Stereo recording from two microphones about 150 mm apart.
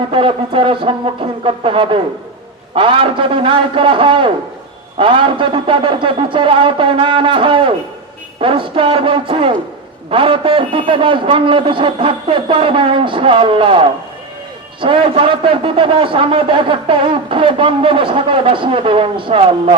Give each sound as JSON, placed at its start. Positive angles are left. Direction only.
{"t": 0.1, "sound": "a man's voice", "side_deg": -35}